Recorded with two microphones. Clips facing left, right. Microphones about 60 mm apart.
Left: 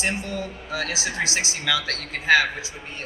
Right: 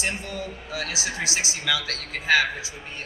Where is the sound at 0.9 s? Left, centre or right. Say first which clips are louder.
Left 2 dB; left.